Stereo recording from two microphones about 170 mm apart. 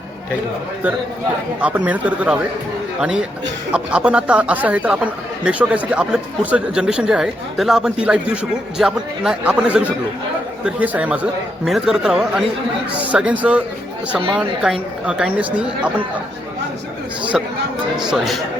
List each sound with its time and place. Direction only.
1.6 s a man's voice: 10° right (ahead or behind)
17.3 s a man's voice: centre (ahead or behind)